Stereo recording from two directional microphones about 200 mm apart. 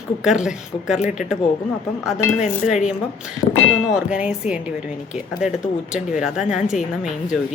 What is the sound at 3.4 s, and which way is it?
Speech, 20° left (ahead or behind).